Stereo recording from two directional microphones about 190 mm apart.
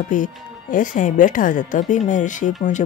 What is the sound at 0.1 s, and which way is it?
Speech, 45° left (ahead or behind).